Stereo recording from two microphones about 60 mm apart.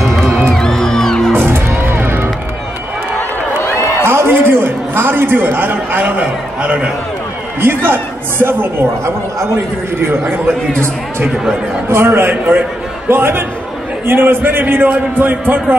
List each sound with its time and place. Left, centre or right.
0.5 s music: centre
1.3 s music: right
3.6 s a sound: left
4.0 s a sound: right; by 6.9 s centre
7.6 s a man's voice: right
11.9 s a man's voice: right